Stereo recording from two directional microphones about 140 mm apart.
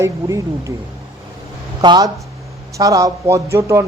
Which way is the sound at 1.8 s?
30° right (ahead or behind).